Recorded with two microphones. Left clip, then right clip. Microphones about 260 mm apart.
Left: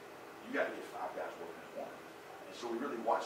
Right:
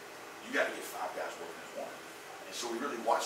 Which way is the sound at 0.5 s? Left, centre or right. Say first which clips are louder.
Right 4 dB; centre.